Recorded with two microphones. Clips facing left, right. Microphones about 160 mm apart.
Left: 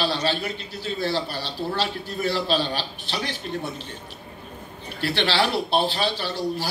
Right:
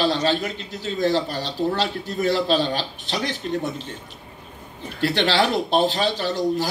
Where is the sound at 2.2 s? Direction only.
35° left (ahead or behind).